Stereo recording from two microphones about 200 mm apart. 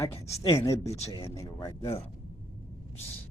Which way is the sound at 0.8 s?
30° left (ahead or behind).